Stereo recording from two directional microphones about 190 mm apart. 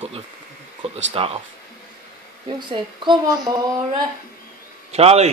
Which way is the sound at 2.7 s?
25° right (ahead or behind).